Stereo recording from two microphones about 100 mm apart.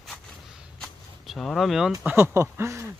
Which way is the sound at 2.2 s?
25° right (ahead or behind).